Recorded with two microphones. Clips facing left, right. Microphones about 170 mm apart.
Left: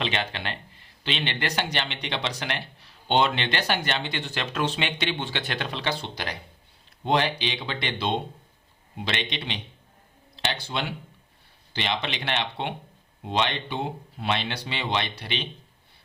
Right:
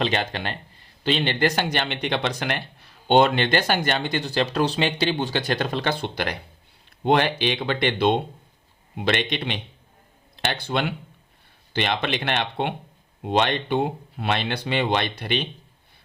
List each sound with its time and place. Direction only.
0.0 s speech: 45° right (ahead or behind)